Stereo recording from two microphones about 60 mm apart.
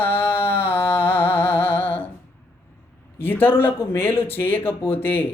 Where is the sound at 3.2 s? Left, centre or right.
Left.